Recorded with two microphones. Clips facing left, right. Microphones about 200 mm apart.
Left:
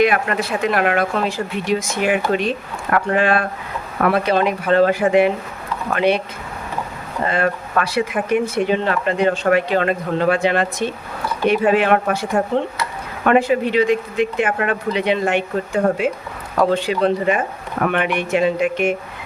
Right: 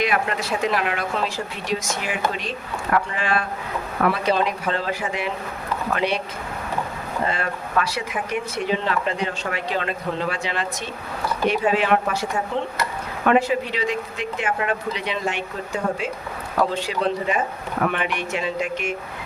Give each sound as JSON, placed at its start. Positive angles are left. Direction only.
{"t": 0.0, "sound": "speech", "side_deg": 55}
{"t": 7.3, "sound": "speech", "side_deg": 55}